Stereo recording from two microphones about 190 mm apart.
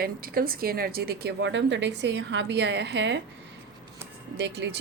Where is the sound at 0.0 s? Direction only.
50° right (ahead or behind); by 3.2 s 65° right (ahead or behind).